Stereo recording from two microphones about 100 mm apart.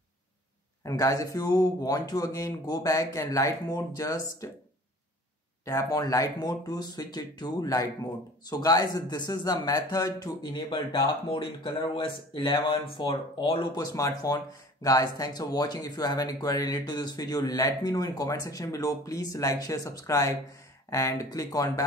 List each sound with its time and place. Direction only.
0.8 s speech: 35° left (ahead or behind)
5.7 s speech: 35° left (ahead or behind); by 13.6 s 60° left (ahead or behind)
13.7 s speech: 35° left (ahead or behind)